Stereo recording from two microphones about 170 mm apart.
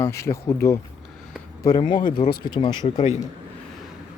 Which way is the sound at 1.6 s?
20° left (ahead or behind).